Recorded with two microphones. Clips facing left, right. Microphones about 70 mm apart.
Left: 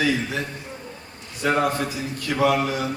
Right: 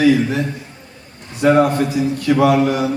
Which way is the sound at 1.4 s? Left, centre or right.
Right.